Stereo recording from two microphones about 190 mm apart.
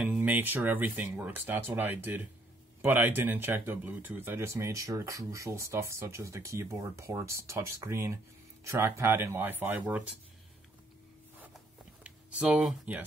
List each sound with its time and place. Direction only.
0.0 s speech: 5° right (ahead or behind)
12.0 s speech: 5° right (ahead or behind)